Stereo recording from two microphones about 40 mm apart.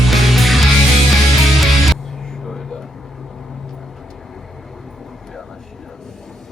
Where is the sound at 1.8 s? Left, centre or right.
Centre.